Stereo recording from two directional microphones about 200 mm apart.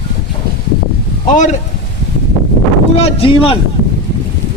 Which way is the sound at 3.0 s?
30° left (ahead or behind).